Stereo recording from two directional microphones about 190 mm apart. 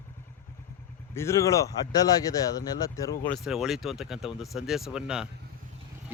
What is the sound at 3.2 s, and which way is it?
Speech, centre (ahead or behind).